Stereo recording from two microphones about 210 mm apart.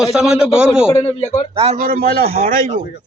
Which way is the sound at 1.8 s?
40° right (ahead or behind).